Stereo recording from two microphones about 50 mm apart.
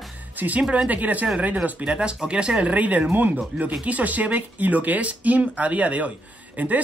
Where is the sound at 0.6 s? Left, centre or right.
Centre.